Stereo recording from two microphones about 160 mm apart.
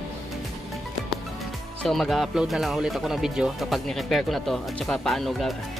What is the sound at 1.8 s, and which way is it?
A man's voice, centre (ahead or behind).